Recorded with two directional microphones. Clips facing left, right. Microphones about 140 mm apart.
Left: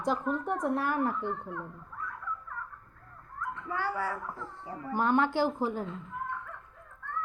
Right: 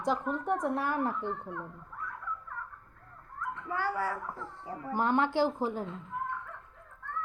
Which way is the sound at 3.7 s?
40° right (ahead or behind).